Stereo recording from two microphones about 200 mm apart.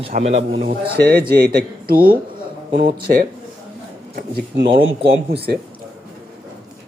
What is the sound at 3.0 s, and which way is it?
Speech, 50° right (ahead or behind).